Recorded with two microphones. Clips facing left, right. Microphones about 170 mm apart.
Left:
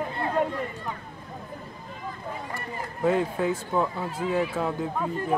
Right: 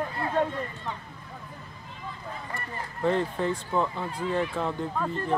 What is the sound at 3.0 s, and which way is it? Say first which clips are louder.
Speech: left 2 dB; 5° left (ahead or behind).